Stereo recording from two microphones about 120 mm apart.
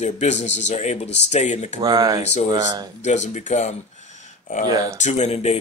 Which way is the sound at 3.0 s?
75° left (ahead or behind).